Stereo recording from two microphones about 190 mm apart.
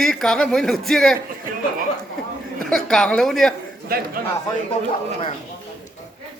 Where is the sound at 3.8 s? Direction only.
50° right (ahead or behind).